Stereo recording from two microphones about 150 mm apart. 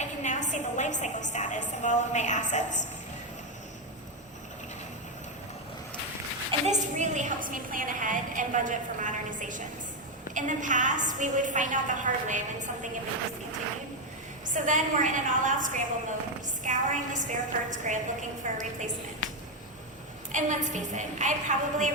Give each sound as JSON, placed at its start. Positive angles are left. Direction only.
{"t": 0.0, "sound": "a woman's voice", "side_deg": 55}
{"t": 6.7, "sound": "a woman's voice", "side_deg": -55}
{"t": 14.5, "sound": "a woman's voice", "side_deg": -55}
{"t": 20.3, "sound": "a woman's voice", "side_deg": -55}